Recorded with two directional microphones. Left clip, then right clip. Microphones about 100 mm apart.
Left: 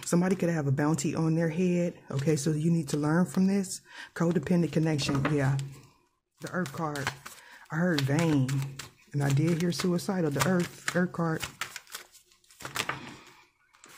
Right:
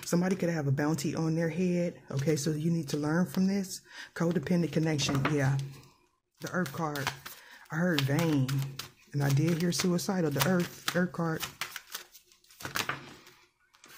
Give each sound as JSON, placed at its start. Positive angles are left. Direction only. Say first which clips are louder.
{"t": 0.0, "sound": "speech", "louder": "left 2 dB", "side_deg": 30}
{"t": 6.4, "sound": "speech", "louder": "even", "side_deg": 10}
{"t": 6.9, "sound": "chopping", "louder": "left 1 dB", "side_deg": 0}
{"t": 7.4, "sound": "speech", "louder": "left 2 dB", "side_deg": 20}